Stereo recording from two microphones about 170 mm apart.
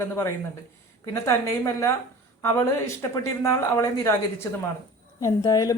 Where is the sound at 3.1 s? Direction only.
15° left (ahead or behind).